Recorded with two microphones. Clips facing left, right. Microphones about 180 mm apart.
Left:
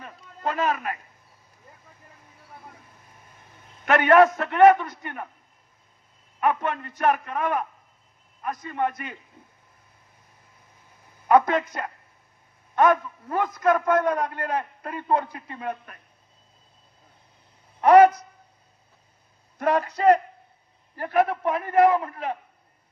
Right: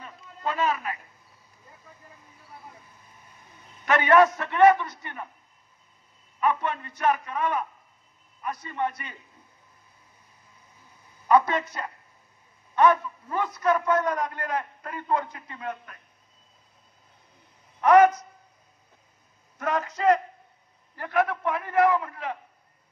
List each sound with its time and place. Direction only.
0.0 s a sound: 55° left (ahead or behind)
3.8 s a man's voice: 55° left (ahead or behind)
6.4 s a man's voice: 55° left (ahead or behind)
8.6 s a man's voice: 50° left (ahead or behind)
11.2 s a man's voice: 55° left (ahead or behind)
14.3 s a man's voice: 30° left (ahead or behind)
17.7 s a man's voice: 30° left (ahead or behind)
19.6 s a man's voice: 35° left (ahead or behind)
21.3 s a man's voice: 25° left (ahead or behind)
21.9 s a man's voice: 35° left (ahead or behind)